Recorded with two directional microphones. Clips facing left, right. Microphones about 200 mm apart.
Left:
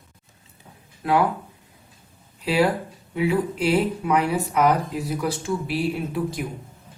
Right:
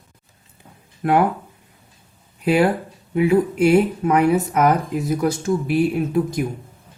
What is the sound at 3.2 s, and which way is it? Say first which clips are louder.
Speech: right 6 dB; 50° right (ahead or behind).